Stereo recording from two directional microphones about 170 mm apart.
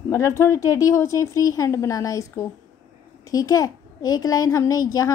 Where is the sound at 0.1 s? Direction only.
15° left (ahead or behind).